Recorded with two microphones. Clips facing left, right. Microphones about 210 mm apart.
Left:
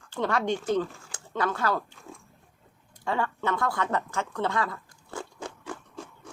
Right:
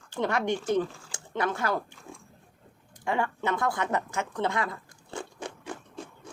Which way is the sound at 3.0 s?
15° right (ahead or behind).